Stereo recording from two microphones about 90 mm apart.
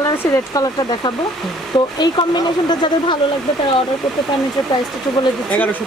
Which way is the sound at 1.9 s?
55° left (ahead or behind).